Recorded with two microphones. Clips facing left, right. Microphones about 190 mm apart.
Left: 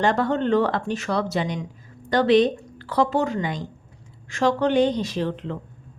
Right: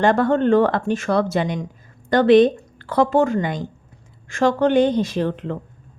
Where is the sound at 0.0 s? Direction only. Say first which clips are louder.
Right 5 dB; 50° right (ahead or behind).